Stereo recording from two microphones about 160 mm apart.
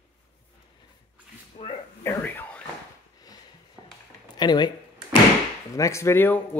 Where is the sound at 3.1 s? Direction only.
25° left (ahead or behind).